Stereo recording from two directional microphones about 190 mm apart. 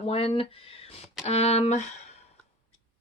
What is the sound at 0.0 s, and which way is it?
Speech, 30° left (ahead or behind).